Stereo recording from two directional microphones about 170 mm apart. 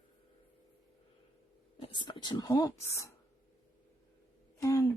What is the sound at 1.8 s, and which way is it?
Speech, 30° left (ahead or behind).